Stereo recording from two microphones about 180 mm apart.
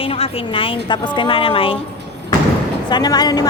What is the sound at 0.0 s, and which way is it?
A woman's voice, 30° left (ahead or behind).